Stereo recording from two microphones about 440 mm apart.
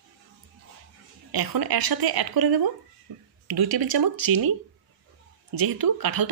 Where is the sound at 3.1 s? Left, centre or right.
Right.